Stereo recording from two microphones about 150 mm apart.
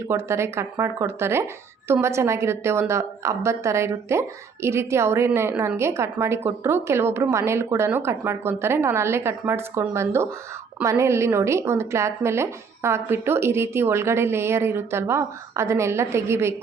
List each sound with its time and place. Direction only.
0.1 s a woman's voice: 20° right (ahead or behind)